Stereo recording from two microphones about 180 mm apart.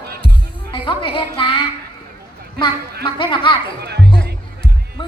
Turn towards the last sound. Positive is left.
turn(degrees=-65)  # may be behind; listen again after turning